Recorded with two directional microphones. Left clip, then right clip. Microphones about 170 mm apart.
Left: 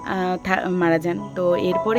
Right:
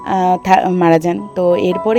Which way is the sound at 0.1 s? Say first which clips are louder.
Right 11 dB; 30° right (ahead or behind).